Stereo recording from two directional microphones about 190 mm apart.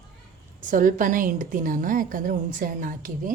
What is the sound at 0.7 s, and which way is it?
A woman's voice, 45° right (ahead or behind).